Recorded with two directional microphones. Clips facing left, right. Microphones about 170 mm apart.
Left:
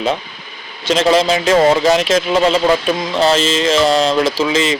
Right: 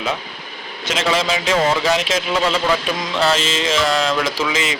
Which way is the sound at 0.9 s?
40° left (ahead or behind).